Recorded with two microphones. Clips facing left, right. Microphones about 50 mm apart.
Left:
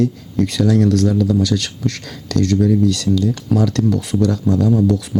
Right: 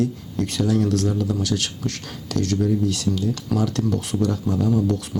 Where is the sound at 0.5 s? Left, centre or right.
Left.